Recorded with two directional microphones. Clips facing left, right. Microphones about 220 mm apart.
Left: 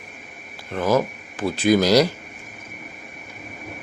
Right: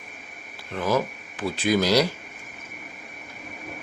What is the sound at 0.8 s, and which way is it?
Speech, 45° left (ahead or behind).